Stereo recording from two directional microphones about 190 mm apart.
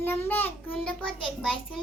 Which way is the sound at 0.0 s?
10° left (ahead or behind).